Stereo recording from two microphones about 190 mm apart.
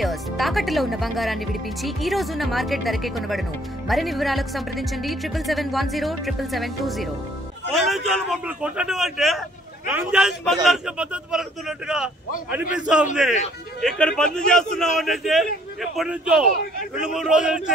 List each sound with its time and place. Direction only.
0.0 s speech: centre (ahead or behind)
12.4 s speech: 5° right (ahead or behind)